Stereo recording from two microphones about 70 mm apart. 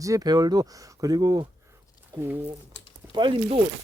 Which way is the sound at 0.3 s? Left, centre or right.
Right.